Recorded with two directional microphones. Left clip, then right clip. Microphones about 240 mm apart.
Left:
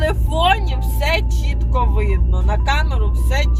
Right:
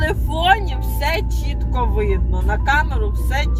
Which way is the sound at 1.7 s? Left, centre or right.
Left.